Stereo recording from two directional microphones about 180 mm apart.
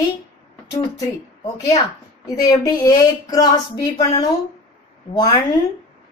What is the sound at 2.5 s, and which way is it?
A woman's voice, 20° left (ahead or behind).